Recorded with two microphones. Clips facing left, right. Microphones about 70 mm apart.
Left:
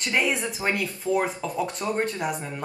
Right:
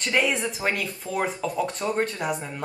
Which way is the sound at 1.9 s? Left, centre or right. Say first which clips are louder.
Even; centre.